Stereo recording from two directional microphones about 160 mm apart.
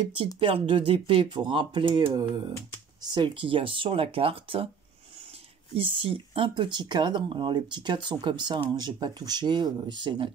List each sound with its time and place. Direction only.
0.0 s speech: 35° right (ahead or behind)
5.8 s speech: 35° right (ahead or behind)